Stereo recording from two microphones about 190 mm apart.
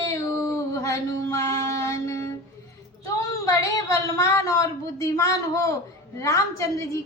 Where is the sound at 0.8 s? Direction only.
15° left (ahead or behind).